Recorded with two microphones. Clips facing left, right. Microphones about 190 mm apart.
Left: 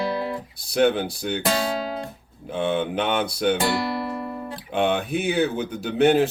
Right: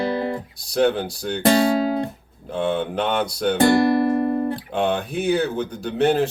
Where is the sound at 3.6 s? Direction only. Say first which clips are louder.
Right 9 dB; 50° right (ahead or behind).